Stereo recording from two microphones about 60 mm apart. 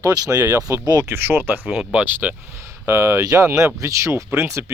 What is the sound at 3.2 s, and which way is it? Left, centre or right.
Speech, right.